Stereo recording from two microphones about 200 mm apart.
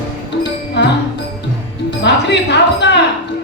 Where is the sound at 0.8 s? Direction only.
60° left (ahead or behind).